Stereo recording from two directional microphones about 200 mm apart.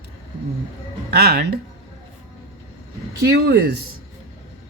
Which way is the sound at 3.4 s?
55° right (ahead or behind).